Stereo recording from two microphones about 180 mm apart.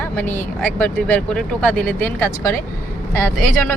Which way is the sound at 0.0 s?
10° left (ahead or behind).